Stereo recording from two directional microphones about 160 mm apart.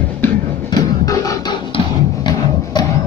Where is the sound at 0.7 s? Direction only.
25° left (ahead or behind).